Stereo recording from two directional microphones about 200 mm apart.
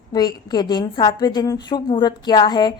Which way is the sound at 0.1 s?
20° left (ahead or behind).